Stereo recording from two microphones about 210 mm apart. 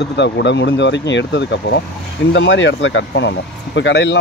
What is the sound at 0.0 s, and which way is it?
Speech, 55° left (ahead or behind).